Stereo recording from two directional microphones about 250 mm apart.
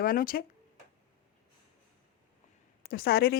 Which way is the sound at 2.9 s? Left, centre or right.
Left.